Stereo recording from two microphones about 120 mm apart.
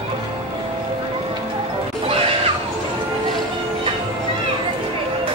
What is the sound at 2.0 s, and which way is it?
Neigh, 50° right (ahead or behind).